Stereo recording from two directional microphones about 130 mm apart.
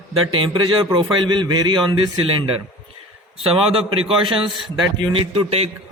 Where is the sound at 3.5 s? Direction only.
45° right (ahead or behind).